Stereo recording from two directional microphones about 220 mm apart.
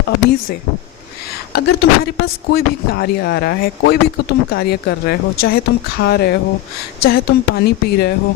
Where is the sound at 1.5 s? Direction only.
50° left (ahead or behind).